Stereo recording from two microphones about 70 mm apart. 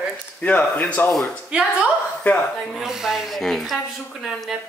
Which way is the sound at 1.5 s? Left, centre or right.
Centre.